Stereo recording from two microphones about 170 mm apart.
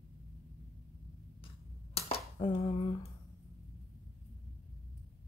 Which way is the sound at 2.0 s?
35° left (ahead or behind).